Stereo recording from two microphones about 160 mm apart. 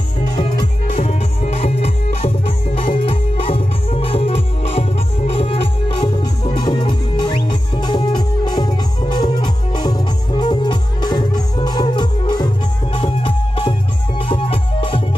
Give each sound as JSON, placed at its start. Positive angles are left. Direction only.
{"t": 0.6, "sound": "music", "side_deg": 35}